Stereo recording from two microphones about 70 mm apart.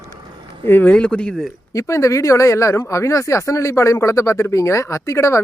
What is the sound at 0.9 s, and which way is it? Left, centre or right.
Speech, centre.